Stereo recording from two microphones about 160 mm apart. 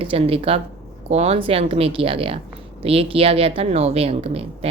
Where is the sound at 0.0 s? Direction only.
35° right (ahead or behind).